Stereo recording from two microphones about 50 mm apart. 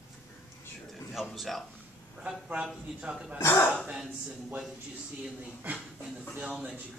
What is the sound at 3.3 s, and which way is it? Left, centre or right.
Speech, left.